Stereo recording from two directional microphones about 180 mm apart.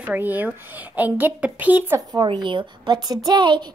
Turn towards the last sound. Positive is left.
turn(degrees=-25)  # may be behind; listen again after turning